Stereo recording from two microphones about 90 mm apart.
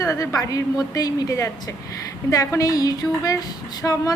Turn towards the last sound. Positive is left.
turn(degrees=20)  # may be behind; listen again after turning